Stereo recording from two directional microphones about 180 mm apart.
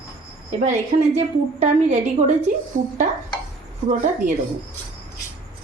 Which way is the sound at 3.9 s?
45° right (ahead or behind).